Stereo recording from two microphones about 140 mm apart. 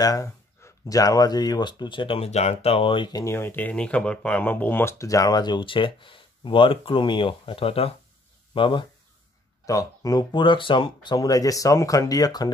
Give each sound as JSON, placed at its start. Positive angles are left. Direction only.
{"t": 0.0, "sound": "speech", "side_deg": 25}
{"t": 3.3, "sound": "speech", "side_deg": 15}
{"t": 9.7, "sound": "speech", "side_deg": 25}